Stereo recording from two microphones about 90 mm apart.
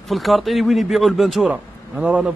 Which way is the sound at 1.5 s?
15° right (ahead or behind).